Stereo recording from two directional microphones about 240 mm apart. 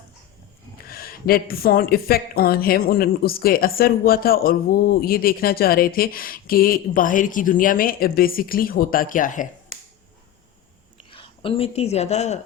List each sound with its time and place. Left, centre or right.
0.9 s speech: left
11.1 s speech: left